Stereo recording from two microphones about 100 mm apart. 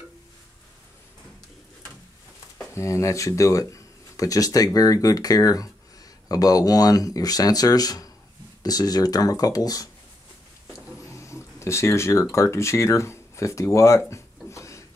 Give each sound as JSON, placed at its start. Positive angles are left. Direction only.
{"t": 2.7, "sound": "speech", "side_deg": 30}
{"t": 11.1, "sound": "speech", "side_deg": 30}